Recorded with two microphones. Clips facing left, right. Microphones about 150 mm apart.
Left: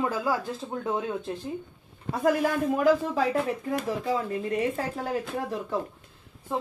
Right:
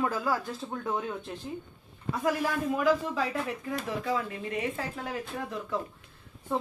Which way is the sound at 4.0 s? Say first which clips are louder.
Left 4 dB; 30° left (ahead or behind).